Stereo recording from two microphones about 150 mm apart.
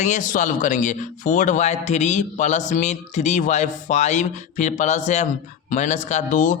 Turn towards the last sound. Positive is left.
turn(degrees=55)  # may be behind; listen again after turning